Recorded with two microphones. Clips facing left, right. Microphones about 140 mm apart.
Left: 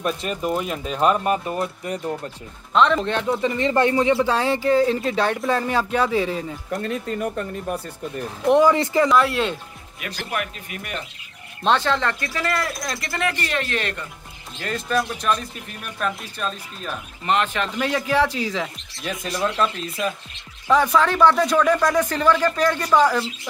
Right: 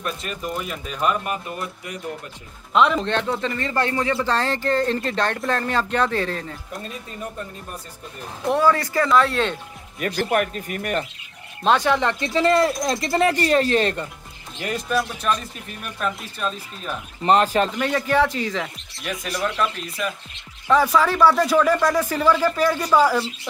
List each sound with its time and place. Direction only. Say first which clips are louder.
0.0 s speech: left 5 dB; 35° left (ahead or behind)
2.7 s speech: left 1 dB; 5° right (ahead or behind)
3.1 s speech: left 2 dB; 5° left (ahead or behind)
6.7 s speech: left 8 dB; 75° left (ahead or behind)
8.5 s speech: left 3 dB; 20° left (ahead or behind)
9.1 s speech: even; 5° left (ahead or behind)
9.9 s speech: right 7 dB; 45° right (ahead or behind)
11.6 s speech: right 1 dB; 10° right (ahead or behind); by 14.0 s 35° right (ahead or behind)
14.6 s speech: even; 10° right (ahead or behind)
17.2 s speech: right 5 dB; 35° right (ahead or behind)
17.7 s speech: right 1 dB; centre (ahead or behind)
19.0 s speech: left 1 dB; 25° left (ahead or behind)
20.6 s speech: even; centre (ahead or behind)